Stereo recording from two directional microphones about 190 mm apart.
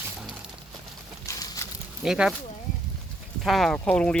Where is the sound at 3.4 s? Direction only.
Centre (ahead or behind).